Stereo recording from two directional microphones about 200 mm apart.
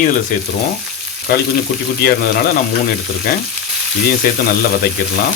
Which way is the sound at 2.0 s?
50° left (ahead or behind).